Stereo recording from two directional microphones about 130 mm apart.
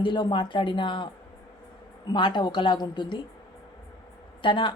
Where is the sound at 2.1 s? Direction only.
35° left (ahead or behind).